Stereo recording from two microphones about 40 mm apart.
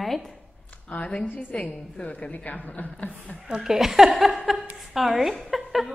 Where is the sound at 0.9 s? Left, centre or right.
Left.